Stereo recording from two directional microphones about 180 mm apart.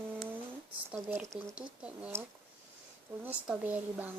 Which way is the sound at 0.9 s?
10° right (ahead or behind).